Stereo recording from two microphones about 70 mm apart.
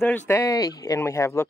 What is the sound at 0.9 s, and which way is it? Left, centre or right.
Speech, left.